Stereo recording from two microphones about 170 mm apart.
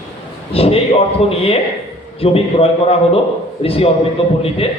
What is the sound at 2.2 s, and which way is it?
A man's voice, 35° left (ahead or behind).